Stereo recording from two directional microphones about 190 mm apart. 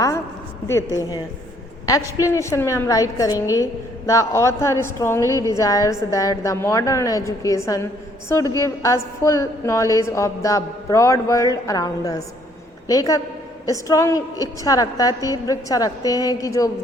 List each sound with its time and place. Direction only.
0.7 s a woman's voice: 15° left (ahead or behind)